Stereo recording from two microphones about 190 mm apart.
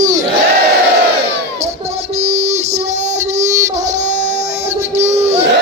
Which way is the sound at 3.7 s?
40° right (ahead or behind).